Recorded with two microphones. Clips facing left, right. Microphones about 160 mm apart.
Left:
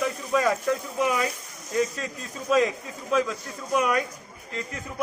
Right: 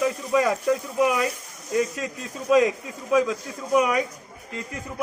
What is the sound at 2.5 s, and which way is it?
Speech, 10° right (ahead or behind).